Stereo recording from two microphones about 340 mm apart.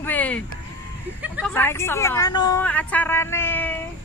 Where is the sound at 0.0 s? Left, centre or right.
Centre.